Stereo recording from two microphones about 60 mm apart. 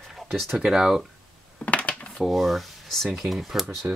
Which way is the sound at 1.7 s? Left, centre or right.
Left.